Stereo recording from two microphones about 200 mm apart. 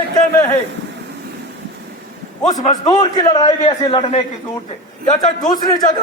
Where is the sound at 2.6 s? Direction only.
20° left (ahead or behind).